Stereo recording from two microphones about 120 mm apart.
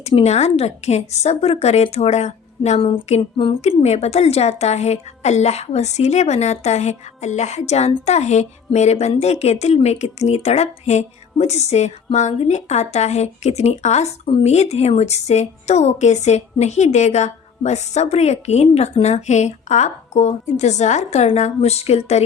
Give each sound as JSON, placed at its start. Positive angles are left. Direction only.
{"t": 0.2, "sound": "a woman's voice", "side_deg": 65}
{"t": 2.8, "sound": "a sound", "side_deg": 50}
{"t": 3.6, "sound": "a woman's voice", "side_deg": 65}